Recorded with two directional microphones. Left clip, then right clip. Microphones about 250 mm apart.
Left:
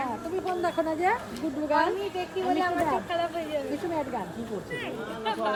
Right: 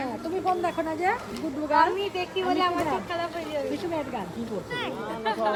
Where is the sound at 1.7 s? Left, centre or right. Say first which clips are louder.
Right 4 dB; centre.